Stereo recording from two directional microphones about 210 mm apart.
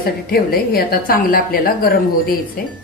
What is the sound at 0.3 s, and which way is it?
A woman's voice, 45° left (ahead or behind).